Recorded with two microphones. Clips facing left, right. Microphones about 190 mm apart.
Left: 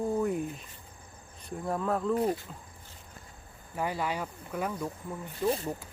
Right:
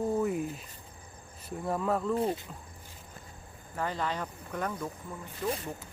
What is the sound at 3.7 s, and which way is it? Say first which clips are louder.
Speech: left 1 dB; 10° left (ahead or behind).